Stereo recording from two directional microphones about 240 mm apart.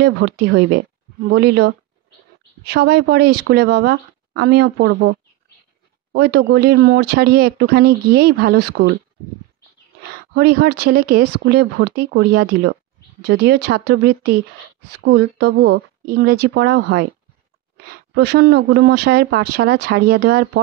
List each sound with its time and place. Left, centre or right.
0.0 s speech: right
6.1 s speech: right
10.3 s a woman's voice: right